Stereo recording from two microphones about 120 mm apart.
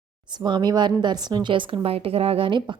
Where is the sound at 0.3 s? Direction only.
40° right (ahead or behind).